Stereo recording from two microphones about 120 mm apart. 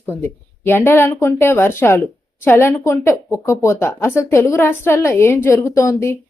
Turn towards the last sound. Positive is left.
turn(degrees=25)  # may be behind; listen again after turning